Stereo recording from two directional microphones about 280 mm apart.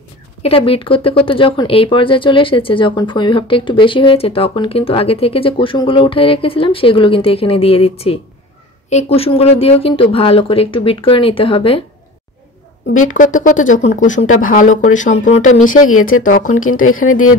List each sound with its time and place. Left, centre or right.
0.4 s speech: centre
12.8 s speech: left
13.1 s speech: left
15.9 s speech: left
16.2 s speech: left
17.1 s speech: left